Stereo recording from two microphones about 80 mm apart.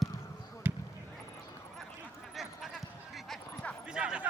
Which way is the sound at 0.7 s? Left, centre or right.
Right.